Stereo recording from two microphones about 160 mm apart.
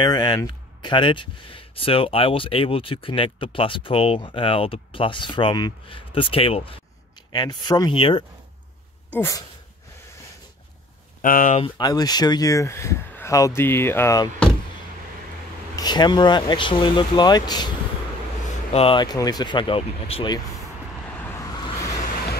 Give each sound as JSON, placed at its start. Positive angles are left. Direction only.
{"t": 0.0, "sound": "speech", "side_deg": 25}
{"t": 9.1, "sound": "speech", "side_deg": 15}
{"t": 11.1, "sound": "speech", "side_deg": 55}
{"t": 11.8, "sound": "speech", "side_deg": 25}
{"t": 15.7, "sound": "speech", "side_deg": 25}
{"t": 18.7, "sound": "speech", "side_deg": 35}